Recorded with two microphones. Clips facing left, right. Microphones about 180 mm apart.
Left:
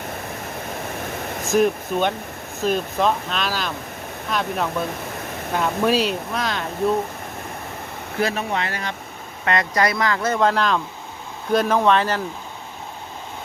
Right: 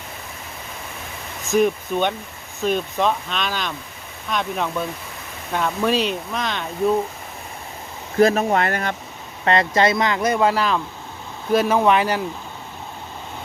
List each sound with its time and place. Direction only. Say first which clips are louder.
1.0 s a sound: left 7 dB; 55° left (ahead or behind)
1.5 s speech: even; centre (ahead or behind)
8.2 s speech: right 7 dB; 45° right (ahead or behind)
9.4 s speech: right 3 dB; 30° right (ahead or behind); by 12.2 s 10° right (ahead or behind)